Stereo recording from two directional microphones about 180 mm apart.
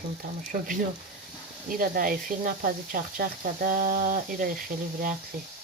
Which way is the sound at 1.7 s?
55° right (ahead or behind).